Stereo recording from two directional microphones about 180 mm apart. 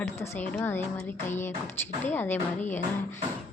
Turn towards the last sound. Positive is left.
turn(degrees=10)  # may be behind; listen again after turning